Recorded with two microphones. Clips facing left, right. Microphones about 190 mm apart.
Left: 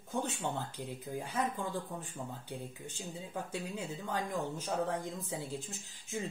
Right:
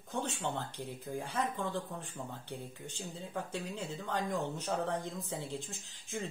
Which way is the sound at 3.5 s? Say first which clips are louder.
Even; 5° left (ahead or behind).